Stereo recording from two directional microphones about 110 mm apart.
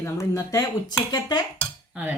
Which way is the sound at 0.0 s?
30° left (ahead or behind).